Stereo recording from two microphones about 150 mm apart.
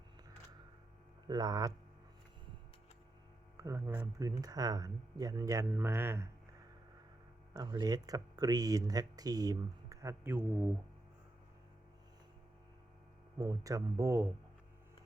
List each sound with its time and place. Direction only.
1.3 s speech: 25° right (ahead or behind)
3.6 s speech: 20° right (ahead or behind)
7.5 s speech: 25° right (ahead or behind); by 10.8 s 10° right (ahead or behind)
13.4 s speech: 25° right (ahead or behind)